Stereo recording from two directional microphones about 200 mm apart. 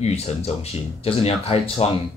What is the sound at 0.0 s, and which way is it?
Speech, 30° left (ahead or behind).